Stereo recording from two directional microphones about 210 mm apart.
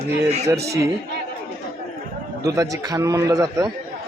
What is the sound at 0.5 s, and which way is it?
Speech, 50° right (ahead or behind).